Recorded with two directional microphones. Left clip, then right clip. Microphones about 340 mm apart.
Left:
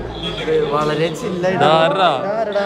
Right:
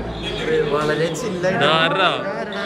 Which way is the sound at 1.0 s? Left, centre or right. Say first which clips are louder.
Left 2 dB; left.